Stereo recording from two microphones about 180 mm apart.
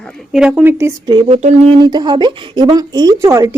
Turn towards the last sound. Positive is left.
turn(degrees=-15)  # may be behind; listen again after turning